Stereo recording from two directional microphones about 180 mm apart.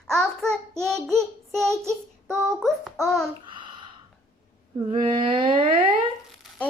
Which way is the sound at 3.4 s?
25° right (ahead or behind).